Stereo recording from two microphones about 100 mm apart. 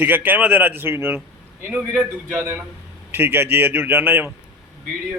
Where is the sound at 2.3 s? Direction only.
30° right (ahead or behind).